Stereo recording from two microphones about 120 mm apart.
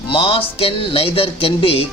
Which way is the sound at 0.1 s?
45° left (ahead or behind).